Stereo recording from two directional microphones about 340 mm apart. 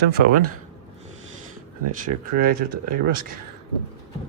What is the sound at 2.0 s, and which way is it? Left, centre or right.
Speech, right.